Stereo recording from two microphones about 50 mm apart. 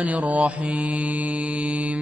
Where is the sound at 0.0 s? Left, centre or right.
Right.